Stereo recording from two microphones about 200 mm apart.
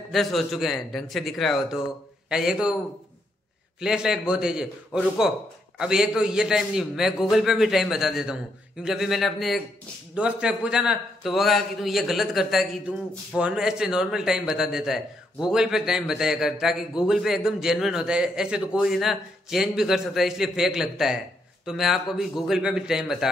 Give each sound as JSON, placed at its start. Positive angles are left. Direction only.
{"t": 0.1, "sound": "a man's voice", "side_deg": 0}
{"t": 3.8, "sound": "a man's voice", "side_deg": -5}